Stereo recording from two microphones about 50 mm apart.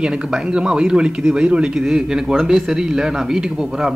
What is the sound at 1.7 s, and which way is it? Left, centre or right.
Speech, centre.